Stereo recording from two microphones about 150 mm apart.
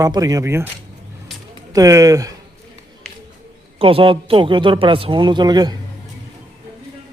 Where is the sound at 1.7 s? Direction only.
25° right (ahead or behind).